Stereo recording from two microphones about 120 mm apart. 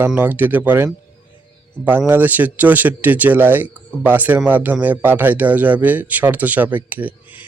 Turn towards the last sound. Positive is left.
turn(degrees=-15)  # may be behind; listen again after turning